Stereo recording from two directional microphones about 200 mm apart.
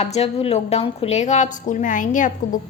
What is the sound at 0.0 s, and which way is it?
A woman's voice, 30° left (ahead or behind).